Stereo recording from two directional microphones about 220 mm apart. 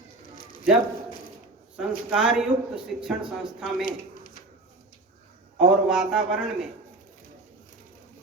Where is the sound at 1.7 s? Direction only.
5° right (ahead or behind).